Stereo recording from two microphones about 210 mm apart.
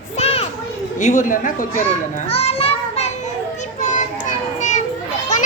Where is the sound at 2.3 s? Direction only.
30° left (ahead or behind).